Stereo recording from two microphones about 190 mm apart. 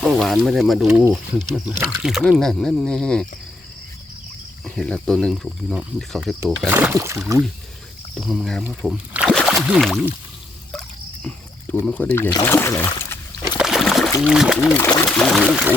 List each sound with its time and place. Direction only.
0.0 s speech: centre (ahead or behind)
0.9 s speech: 15° right (ahead or behind); by 3.2 s 5° left (ahead or behind)
4.6 s speech: 5° left (ahead or behind); by 7.3 s 15° right (ahead or behind)
8.1 s speech: centre (ahead or behind)
10.7 s a sound: centre (ahead or behind)
11.9 s speech: 5° left (ahead or behind)
13.6 s rowboat: centre (ahead or behind)
14.3 s speech: 5° right (ahead or behind)